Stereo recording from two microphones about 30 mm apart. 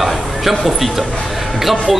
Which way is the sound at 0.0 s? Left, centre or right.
Centre.